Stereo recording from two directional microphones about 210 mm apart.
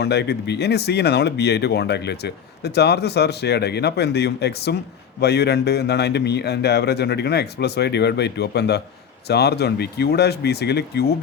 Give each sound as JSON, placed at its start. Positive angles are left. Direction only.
{"t": 0.0, "sound": "speech", "side_deg": 50}